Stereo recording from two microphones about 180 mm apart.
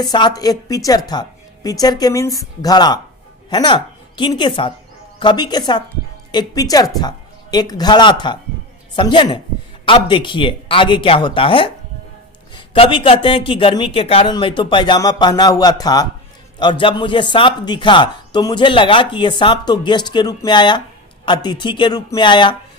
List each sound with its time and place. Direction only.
0.0 s a woman's voice: 25° left (ahead or behind)